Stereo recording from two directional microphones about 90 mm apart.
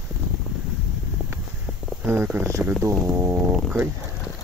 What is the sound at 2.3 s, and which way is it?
Speech, 30° right (ahead or behind).